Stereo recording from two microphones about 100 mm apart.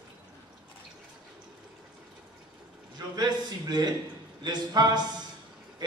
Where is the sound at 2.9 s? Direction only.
45° right (ahead or behind).